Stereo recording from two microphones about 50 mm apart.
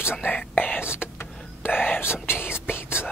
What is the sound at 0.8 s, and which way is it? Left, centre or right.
Whispering, right.